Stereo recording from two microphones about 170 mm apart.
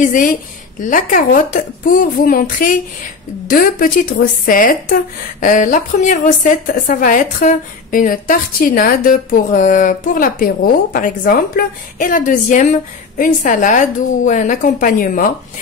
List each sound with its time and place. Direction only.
0.0 s speech: 50° left (ahead or behind)